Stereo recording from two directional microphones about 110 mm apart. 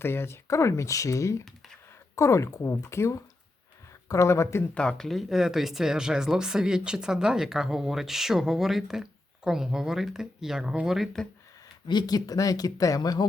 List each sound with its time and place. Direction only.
0.0 s speech: 20° left (ahead or behind)
4.7 s speech: 10° left (ahead or behind)
11.9 s speech: 40° left (ahead or behind)